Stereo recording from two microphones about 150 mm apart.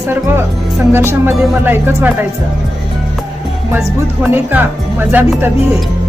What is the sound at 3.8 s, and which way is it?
Music, 10° right (ahead or behind).